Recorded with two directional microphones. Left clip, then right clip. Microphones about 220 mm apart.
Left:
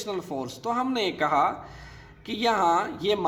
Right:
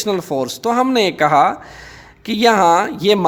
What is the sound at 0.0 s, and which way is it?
Speech, 50° right (ahead or behind).